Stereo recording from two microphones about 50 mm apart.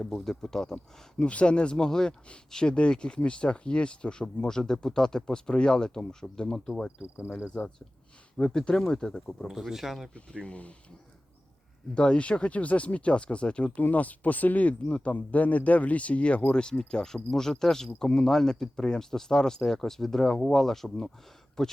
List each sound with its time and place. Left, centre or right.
0.0 s speech: centre
1.2 s speech: left
9.5 s speech: centre
10.2 s speech: left
11.9 s speech: left